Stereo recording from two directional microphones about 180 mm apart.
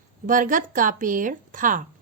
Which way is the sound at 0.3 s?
45° right (ahead or behind).